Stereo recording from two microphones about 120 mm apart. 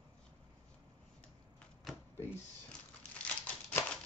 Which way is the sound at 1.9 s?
Centre (ahead or behind).